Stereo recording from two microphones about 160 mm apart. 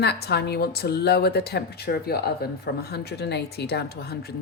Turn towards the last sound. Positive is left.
turn(degrees=80)